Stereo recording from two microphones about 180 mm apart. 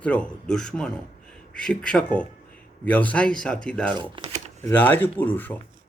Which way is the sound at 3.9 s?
25° right (ahead or behind).